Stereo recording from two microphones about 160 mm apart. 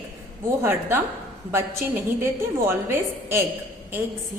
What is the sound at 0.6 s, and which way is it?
Speech, 15° right (ahead or behind).